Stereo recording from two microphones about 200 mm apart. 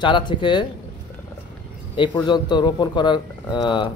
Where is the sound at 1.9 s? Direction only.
25° left (ahead or behind).